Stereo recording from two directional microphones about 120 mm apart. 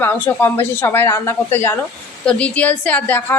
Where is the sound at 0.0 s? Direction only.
20° left (ahead or behind).